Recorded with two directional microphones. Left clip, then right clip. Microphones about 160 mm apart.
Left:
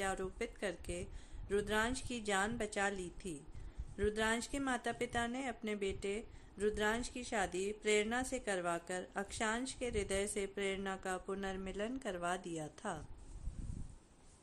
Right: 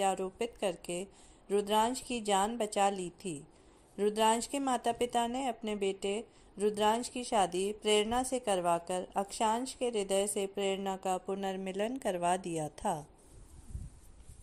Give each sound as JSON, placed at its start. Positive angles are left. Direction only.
{"t": 0.0, "sound": "speech", "side_deg": -20}